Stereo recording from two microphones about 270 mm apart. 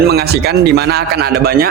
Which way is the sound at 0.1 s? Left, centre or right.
Right.